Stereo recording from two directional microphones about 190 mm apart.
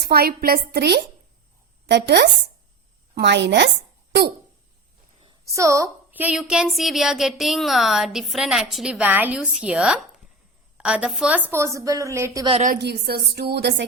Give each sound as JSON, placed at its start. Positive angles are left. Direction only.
{"t": 0.0, "sound": "a woman's voice", "side_deg": -50}
{"t": 5.2, "sound": "a woman's voice", "side_deg": -20}
{"t": 11.5, "sound": "a woman's voice", "side_deg": -15}
{"t": 12.5, "sound": "a woman's voice", "side_deg": -35}
{"t": 12.7, "sound": "a woman's voice", "side_deg": -60}